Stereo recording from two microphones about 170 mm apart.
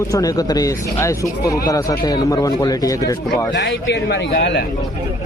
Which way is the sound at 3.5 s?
90° left.